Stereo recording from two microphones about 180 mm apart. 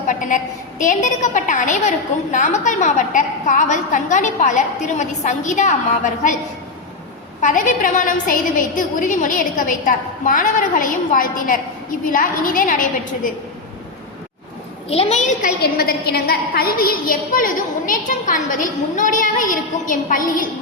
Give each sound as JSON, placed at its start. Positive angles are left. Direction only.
{"t": 0.1, "sound": "a sound", "side_deg": 45}
{"t": 0.8, "sound": "a woman's voice", "side_deg": 45}
{"t": 7.4, "sound": "a woman's voice", "side_deg": 45}
{"t": 14.8, "sound": "a woman's voice", "side_deg": 35}